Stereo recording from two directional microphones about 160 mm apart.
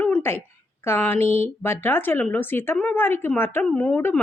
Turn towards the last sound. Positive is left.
turn(degrees=10)  # may be behind; listen again after turning